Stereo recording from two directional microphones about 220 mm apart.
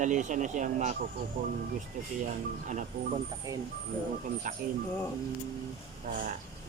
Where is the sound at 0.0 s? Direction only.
35° right (ahead or behind).